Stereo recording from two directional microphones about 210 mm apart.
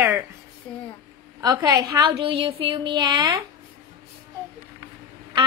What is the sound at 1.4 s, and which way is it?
A woman's voice, 15° right (ahead or behind).